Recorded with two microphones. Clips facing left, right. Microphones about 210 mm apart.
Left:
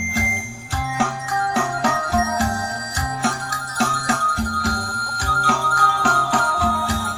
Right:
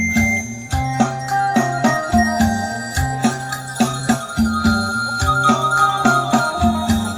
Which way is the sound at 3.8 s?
35° right (ahead or behind).